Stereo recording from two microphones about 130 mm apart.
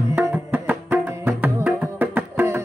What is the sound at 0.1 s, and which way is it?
Music, 15° right (ahead or behind).